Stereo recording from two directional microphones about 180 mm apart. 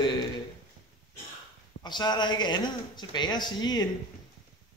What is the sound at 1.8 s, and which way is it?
A man's voice, 25° left (ahead or behind).